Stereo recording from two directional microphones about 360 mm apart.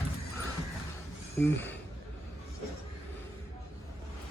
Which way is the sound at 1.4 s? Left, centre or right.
Centre.